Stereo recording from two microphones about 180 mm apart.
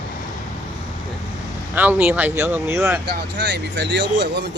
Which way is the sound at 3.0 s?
75° right (ahead or behind).